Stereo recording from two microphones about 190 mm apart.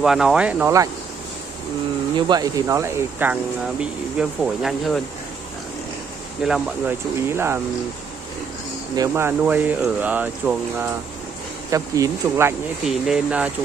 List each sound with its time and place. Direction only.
0.0 s speech: 5° right (ahead or behind)
2.1 s speech: 20° right (ahead or behind); by 5.0 s centre (ahead or behind)
6.4 s speech: 5° right (ahead or behind)
8.9 s speech: 15° right (ahead or behind)
12.8 s speech: centre (ahead or behind)